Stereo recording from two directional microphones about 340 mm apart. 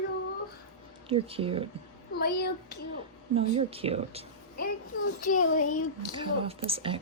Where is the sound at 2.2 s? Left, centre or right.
Left.